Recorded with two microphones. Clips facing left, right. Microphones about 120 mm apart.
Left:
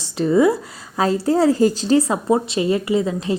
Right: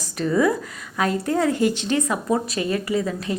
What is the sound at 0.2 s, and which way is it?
A woman's voice, 25° left (ahead or behind).